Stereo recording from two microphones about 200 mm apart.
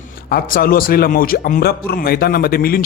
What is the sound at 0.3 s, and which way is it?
A man's voice, 45° left (ahead or behind).